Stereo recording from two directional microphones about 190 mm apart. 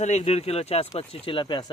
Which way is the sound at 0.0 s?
35° left (ahead or behind).